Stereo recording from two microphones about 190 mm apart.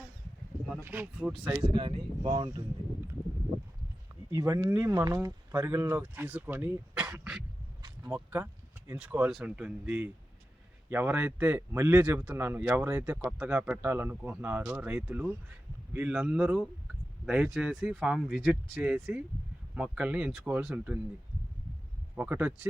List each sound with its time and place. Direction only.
0.7 s speech: 5° right (ahead or behind)
1.7 s speech: 30° right (ahead or behind)
4.3 s speech: 15° right (ahead or behind)
7.8 s a sound: 15° right (ahead or behind)
8.9 s speech: 10° right (ahead or behind)
22.1 s speech: 10° right (ahead or behind)